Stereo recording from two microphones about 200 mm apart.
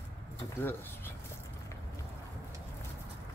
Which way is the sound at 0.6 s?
10° left (ahead or behind).